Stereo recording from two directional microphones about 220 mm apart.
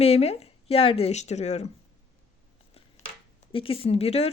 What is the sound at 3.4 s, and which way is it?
Speech, 25° left (ahead or behind).